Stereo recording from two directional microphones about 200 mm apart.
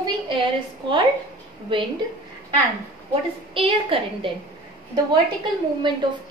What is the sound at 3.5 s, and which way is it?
Speech, 25° right (ahead or behind).